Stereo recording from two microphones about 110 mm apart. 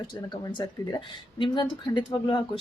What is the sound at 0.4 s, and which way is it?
Speech, 35° left (ahead or behind).